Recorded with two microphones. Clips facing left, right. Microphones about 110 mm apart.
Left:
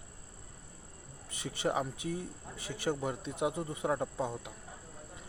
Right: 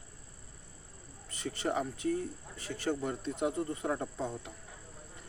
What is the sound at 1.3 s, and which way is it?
Speech, 15° left (ahead or behind).